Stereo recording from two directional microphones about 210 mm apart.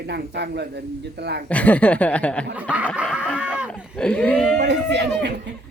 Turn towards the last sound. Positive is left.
turn(degrees=-55)  # may be behind; listen again after turning